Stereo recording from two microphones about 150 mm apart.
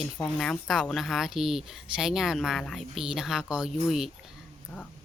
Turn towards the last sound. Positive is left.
turn(degrees=10)  # may be behind; listen again after turning